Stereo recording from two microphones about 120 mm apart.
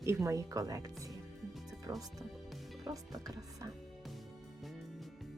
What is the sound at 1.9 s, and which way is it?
Speech, 30° right (ahead or behind).